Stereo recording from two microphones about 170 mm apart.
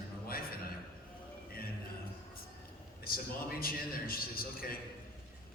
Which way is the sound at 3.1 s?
60° left (ahead or behind).